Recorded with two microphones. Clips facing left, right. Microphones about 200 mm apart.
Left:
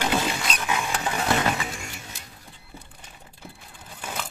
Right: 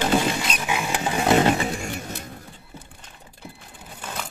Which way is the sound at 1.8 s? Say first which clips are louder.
Right 9 dB; 55° right (ahead or behind).